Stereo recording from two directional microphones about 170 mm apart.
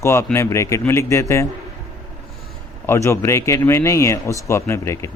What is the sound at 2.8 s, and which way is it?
Speech, 15° left (ahead or behind).